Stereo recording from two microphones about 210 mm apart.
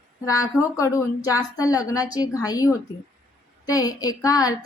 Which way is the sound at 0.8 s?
15° left (ahead or behind).